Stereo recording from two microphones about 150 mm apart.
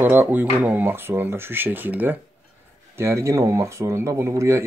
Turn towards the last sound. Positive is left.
turn(degrees=-20)  # may be behind; listen again after turning